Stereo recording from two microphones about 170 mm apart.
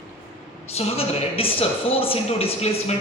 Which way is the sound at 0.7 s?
35° left (ahead or behind).